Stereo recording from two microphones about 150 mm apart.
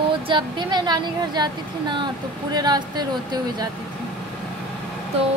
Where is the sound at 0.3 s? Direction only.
30° right (ahead or behind).